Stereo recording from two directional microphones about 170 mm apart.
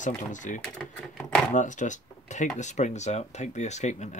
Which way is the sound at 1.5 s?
45° left (ahead or behind).